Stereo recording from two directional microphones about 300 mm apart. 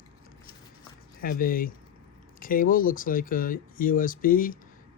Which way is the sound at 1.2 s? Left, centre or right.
Left.